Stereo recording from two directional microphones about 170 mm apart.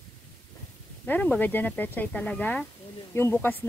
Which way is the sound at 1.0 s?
10° left (ahead or behind).